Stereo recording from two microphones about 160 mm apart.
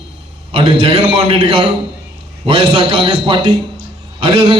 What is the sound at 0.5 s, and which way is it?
A man's voice, 35° right (ahead or behind).